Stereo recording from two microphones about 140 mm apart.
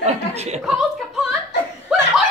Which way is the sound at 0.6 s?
Centre (ahead or behind).